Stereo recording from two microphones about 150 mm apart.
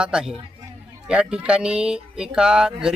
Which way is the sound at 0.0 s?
5° right (ahead or behind).